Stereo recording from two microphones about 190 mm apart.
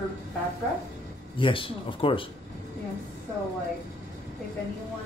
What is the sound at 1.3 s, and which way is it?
Speech, 25° left (ahead or behind).